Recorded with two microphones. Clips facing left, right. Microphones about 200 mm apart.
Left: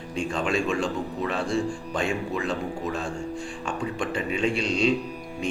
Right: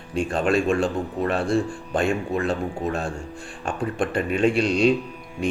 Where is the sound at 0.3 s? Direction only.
55° right (ahead or behind).